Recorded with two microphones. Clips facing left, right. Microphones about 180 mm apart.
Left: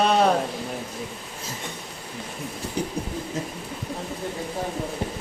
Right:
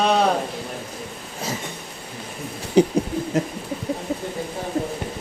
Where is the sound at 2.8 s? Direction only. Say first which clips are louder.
Right 13 dB; 80° right.